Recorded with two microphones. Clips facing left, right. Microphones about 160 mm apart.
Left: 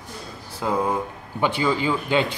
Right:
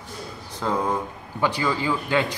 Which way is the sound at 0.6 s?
10° left (ahead or behind).